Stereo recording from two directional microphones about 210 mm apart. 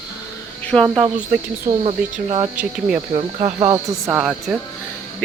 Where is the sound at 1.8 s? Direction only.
30° right (ahead or behind).